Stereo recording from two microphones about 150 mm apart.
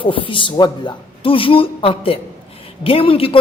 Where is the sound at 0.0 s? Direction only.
35° left (ahead or behind).